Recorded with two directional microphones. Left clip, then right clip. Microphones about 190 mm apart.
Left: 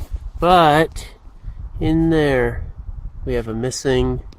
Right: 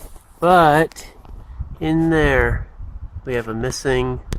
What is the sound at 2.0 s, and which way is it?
Speech, 30° left (ahead or behind).